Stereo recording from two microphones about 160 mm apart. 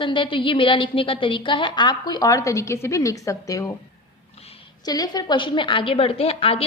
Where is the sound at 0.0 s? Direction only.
30° left (ahead or behind).